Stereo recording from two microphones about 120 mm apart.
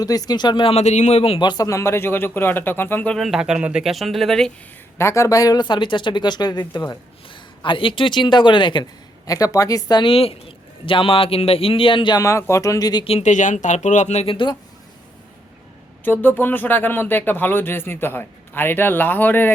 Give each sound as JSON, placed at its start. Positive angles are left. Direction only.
{"t": 0.0, "sound": "speech", "side_deg": 30}
{"t": 1.4, "sound": "speech", "side_deg": 35}
{"t": 3.2, "sound": "speech", "side_deg": 0}
{"t": 4.9, "sound": "a man's voice", "side_deg": 25}
{"t": 7.6, "sound": "a man's voice", "side_deg": 45}
{"t": 10.0, "sound": "speech", "side_deg": 50}
{"t": 12.2, "sound": "speech", "side_deg": 25}
{"t": 13.2, "sound": "speech", "side_deg": 90}
{"t": 14.3, "sound": "speech", "side_deg": 45}
{"t": 16.0, "sound": "speech", "side_deg": 15}